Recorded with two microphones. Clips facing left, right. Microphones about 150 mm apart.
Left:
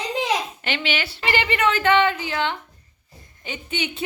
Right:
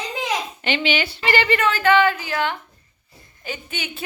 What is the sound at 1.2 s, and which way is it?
Speech, 20° left (ahead or behind).